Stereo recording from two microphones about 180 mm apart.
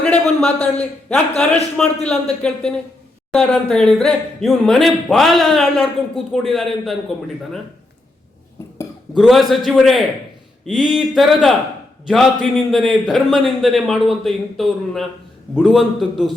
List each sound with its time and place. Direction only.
0.0 s a man's voice: 5° left (ahead or behind)
9.1 s speech: centre (ahead or behind)